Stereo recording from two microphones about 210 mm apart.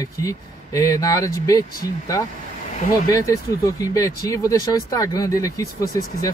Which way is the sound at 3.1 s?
15° left (ahead or behind).